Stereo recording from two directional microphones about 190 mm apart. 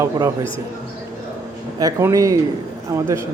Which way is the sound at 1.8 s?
15° right (ahead or behind).